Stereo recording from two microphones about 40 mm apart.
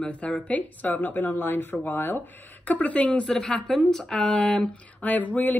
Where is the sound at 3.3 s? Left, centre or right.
Centre.